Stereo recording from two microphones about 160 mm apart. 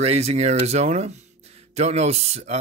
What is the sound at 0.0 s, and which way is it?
Speech, 40° right (ahead or behind).